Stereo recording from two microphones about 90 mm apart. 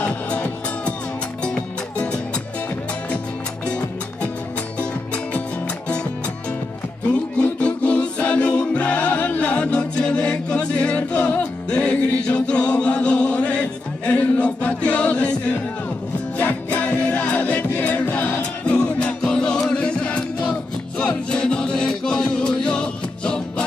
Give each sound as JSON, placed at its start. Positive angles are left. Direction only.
{"t": 0.0, "sound": "music", "side_deg": 15}
{"t": 4.7, "sound": "music", "side_deg": 15}
{"t": 7.1, "sound": "music", "side_deg": 15}